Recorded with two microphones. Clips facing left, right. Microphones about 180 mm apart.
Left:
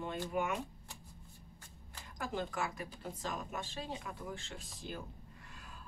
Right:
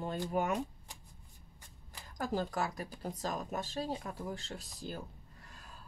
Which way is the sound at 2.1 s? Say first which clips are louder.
Right 4 dB; 40° right (ahead or behind).